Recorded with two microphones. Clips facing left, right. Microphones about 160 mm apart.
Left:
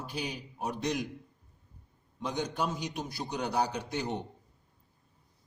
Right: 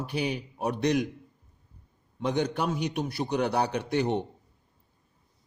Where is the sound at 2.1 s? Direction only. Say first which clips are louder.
Right 5 dB; 65° right (ahead or behind).